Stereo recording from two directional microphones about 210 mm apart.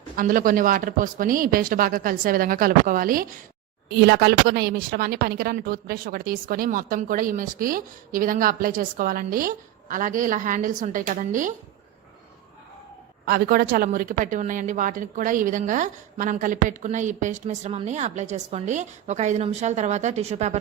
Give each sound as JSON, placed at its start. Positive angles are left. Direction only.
{"t": 0.2, "sound": "speech", "side_deg": -40}
{"t": 13.2, "sound": "speech", "side_deg": -45}